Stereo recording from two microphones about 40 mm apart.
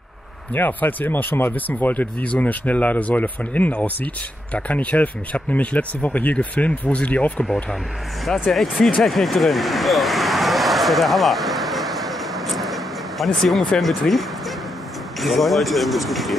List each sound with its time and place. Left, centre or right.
0.6 s speech: left
1.5 s speech: left
8.3 s speech: centre
9.0 s vehicle: centre
13.7 s speech: centre